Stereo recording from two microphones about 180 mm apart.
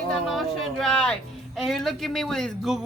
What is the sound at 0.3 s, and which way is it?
Speech, centre (ahead or behind).